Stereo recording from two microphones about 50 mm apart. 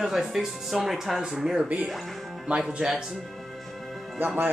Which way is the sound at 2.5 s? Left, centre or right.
Centre.